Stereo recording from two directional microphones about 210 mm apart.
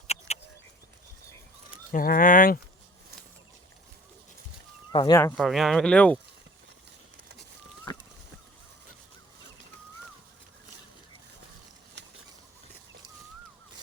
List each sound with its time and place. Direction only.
0.3 s a sound: 30° left (ahead or behind)
1.9 s speech: 40° left (ahead or behind)
4.9 s speech: 20° left (ahead or behind)
5.4 s speech: centre (ahead or behind)